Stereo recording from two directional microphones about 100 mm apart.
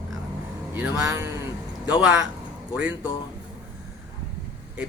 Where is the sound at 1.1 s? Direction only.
30° right (ahead or behind).